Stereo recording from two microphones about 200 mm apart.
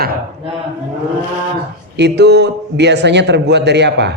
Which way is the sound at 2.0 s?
55° right (ahead or behind).